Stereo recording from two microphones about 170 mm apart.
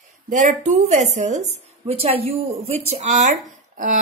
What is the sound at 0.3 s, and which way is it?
A woman's voice, 45° right (ahead or behind).